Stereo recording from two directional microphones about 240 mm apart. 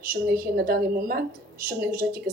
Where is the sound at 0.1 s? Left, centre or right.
Right.